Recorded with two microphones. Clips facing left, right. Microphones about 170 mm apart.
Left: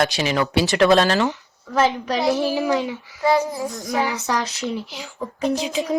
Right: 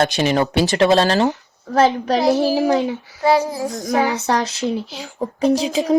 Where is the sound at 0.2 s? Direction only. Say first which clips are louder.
Right 5 dB; 40° right (ahead or behind).